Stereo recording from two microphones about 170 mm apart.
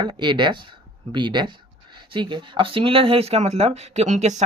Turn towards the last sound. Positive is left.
turn(degrees=-45)  # may be behind; listen again after turning